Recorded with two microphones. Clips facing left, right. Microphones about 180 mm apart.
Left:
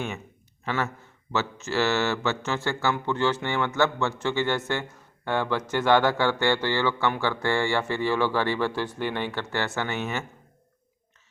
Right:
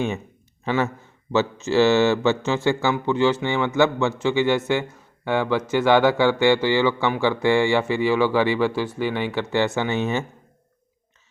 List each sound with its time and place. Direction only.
1.3 s speech: 20° right (ahead or behind)